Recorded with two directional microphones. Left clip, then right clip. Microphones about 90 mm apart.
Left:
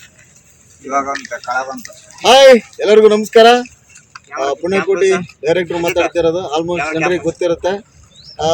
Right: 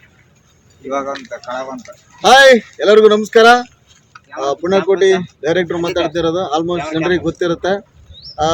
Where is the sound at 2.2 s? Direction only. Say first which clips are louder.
Left 1 dB; 35° right (ahead or behind).